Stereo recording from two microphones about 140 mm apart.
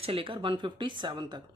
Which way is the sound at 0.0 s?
40° right (ahead or behind).